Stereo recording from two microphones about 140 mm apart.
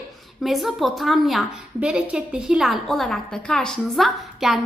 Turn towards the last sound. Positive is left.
turn(degrees=0)  # may be behind; listen again after turning